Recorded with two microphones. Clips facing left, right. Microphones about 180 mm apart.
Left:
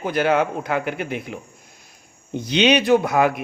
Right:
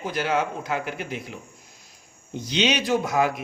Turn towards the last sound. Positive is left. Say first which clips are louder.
# left 5 dB
turn(degrees=60)  # may be behind; listen again after turning